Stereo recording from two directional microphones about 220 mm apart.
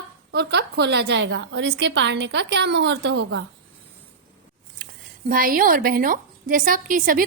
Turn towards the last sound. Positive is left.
turn(degrees=-40)  # may be behind; listen again after turning